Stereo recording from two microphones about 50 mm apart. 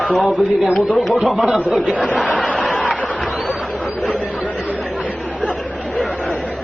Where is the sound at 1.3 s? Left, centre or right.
Right.